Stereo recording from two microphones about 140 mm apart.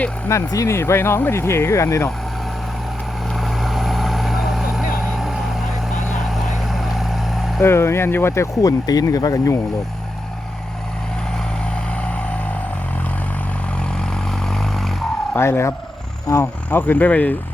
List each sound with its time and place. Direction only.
0.3 s speech: 20° left (ahead or behind)
3.3 s vehicle: centre (ahead or behind)
7.6 s speech: 20° left (ahead or behind)
14.0 s vehicle: 5° left (ahead or behind)
15.3 s speech: 20° left (ahead or behind)